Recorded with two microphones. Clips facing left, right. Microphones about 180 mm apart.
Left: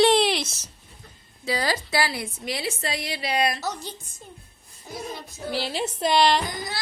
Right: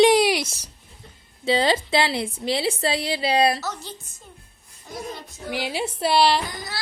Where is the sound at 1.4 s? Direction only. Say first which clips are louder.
Right 6 dB; 25° right (ahead or behind).